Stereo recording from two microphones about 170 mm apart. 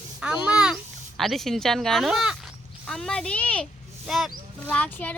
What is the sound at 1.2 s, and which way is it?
Speech, centre (ahead or behind).